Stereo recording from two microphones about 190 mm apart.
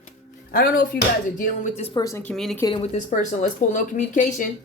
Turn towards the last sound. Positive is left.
turn(degrees=45)  # may be behind; listen again after turning